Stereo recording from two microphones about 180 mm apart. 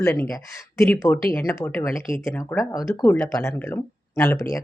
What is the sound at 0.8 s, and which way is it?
Speech, centre (ahead or behind).